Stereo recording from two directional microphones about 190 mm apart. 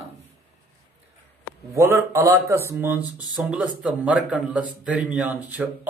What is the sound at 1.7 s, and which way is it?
A man's voice, 15° right (ahead or behind).